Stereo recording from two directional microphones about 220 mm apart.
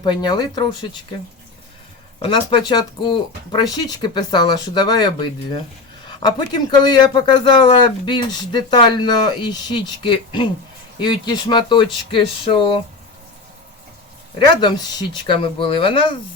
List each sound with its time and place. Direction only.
0.0 s speech: 20° left (ahead or behind)
2.1 s speech: 25° left (ahead or behind)
14.3 s speech: 20° left (ahead or behind)